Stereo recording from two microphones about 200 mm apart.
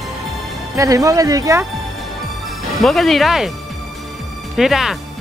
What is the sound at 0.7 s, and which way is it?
Speech, 15° right (ahead or behind).